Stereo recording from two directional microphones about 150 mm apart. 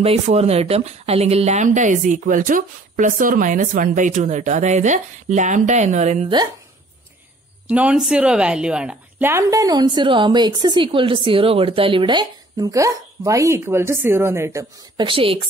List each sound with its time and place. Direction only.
0.0 s speech: 40° right (ahead or behind)
6.2 s a woman's voice: 25° right (ahead or behind)
7.6 s a woman's voice: 10° right (ahead or behind)
9.3 s a woman's voice: 20° right (ahead or behind)
15.0 s speech: 35° right (ahead or behind)